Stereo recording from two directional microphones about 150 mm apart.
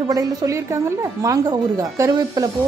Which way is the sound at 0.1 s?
25° right (ahead or behind).